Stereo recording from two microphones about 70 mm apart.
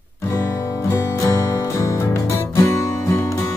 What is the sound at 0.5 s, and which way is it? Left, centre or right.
Music, left.